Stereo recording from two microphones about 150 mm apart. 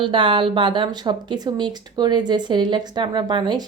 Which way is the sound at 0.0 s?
35° right (ahead or behind).